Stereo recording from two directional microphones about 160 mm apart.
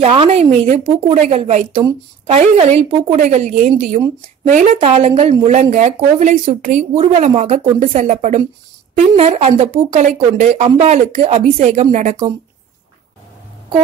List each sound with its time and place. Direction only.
0.0 s speech: 35° right (ahead or behind)
1.1 s speech: 50° right (ahead or behind)
1.4 s speech: 35° right (ahead or behind)